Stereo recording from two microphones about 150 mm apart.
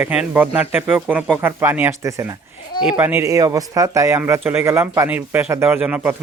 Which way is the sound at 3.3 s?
20° right (ahead or behind).